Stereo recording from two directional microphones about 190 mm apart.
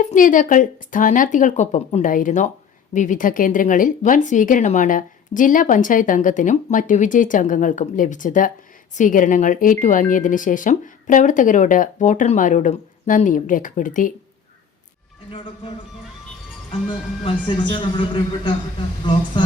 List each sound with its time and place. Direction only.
0.0 s speech: 40° left (ahead or behind)
17.2 s speech: 25° left (ahead or behind)